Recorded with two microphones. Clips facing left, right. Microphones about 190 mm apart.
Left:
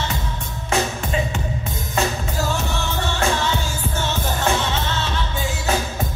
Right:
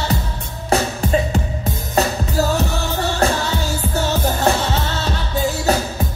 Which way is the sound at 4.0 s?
40° right (ahead or behind).